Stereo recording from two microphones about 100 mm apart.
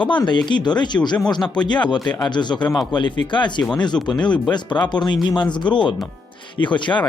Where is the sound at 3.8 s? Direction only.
45° left (ahead or behind).